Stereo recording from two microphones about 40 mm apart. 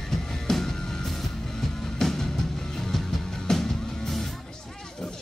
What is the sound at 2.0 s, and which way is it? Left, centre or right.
Music, centre.